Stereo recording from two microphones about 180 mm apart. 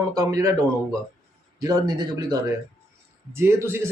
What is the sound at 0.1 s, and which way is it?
Speech, 20° right (ahead or behind).